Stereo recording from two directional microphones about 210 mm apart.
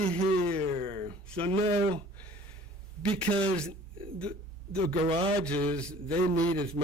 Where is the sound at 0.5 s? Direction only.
30° right (ahead or behind).